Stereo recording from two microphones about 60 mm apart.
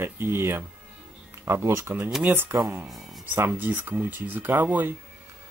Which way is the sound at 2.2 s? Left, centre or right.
Right.